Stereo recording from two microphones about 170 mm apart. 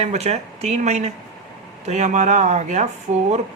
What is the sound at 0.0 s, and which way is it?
Speech, 40° right (ahead or behind).